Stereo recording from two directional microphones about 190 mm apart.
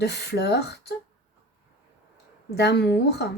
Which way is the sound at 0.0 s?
60° left (ahead or behind).